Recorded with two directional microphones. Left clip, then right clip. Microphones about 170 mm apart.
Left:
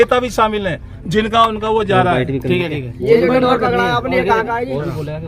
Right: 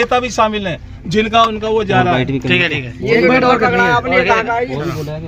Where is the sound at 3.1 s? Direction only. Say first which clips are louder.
Right 4 dB; 40° right (ahead or behind).